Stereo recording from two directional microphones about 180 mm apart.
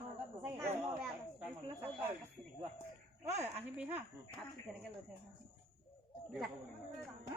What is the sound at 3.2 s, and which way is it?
Speech, 40° right (ahead or behind).